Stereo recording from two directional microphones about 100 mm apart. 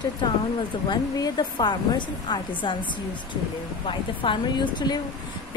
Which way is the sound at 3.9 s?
55° left (ahead or behind).